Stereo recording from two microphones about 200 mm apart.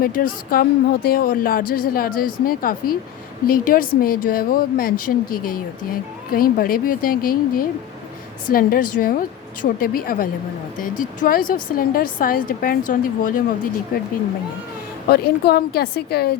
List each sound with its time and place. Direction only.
0.0 s speech: 45° left (ahead or behind)
15.1 s speech: 50° left (ahead or behind)